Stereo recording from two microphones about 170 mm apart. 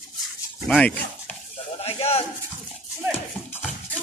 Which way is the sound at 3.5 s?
5° left (ahead or behind).